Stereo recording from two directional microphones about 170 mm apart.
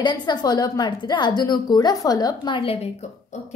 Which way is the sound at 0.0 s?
25° left (ahead or behind).